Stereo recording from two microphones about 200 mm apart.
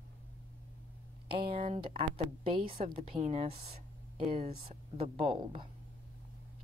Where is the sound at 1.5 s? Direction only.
30° right (ahead or behind).